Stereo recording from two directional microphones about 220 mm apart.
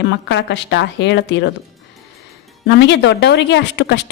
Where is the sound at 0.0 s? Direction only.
55° left (ahead or behind).